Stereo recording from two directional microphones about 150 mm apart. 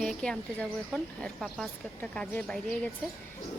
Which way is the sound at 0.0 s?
5° left (ahead or behind).